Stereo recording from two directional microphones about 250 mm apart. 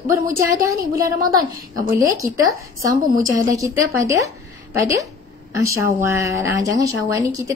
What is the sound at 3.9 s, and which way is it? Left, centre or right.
Speech, centre.